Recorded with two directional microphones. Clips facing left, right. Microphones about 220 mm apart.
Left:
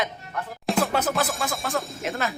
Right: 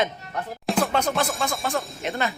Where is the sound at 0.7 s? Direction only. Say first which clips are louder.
Even; centre (ahead or behind).